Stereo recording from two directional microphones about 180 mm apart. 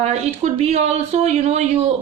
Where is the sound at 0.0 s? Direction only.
35° right (ahead or behind).